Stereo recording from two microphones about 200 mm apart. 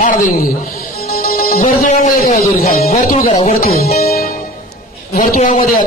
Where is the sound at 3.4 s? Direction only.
50° left (ahead or behind).